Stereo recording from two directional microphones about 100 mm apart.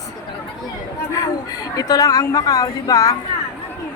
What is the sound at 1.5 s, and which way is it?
A man's voice, 40° left (ahead or behind).